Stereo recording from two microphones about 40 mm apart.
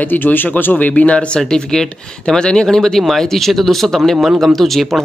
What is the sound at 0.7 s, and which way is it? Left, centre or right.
Speech, left.